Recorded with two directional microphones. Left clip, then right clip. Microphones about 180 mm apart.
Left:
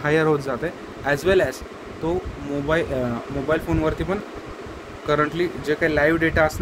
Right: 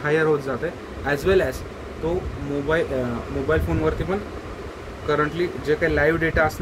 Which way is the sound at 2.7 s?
55° left (ahead or behind).